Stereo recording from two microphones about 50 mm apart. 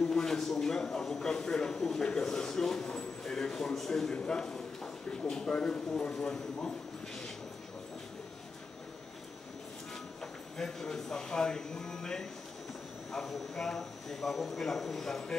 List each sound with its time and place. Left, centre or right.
0.0 s a sound: centre
5.1 s speech: centre
10.2 s speech: centre